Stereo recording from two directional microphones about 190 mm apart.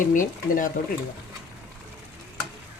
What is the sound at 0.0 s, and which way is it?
Speech, 45° left (ahead or behind).